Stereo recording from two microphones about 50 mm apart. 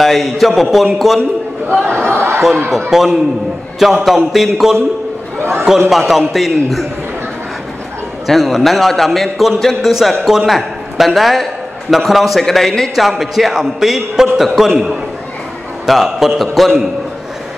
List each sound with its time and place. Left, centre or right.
0.0 s a man's voice: centre
1.9 s a sound: right
2.9 s a man's voice: centre
5.4 s a man's voice: right
5.9 s a man's voice: centre
8.3 s a man's voice: centre